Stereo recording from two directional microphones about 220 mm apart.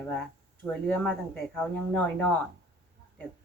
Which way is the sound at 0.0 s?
10° left (ahead or behind).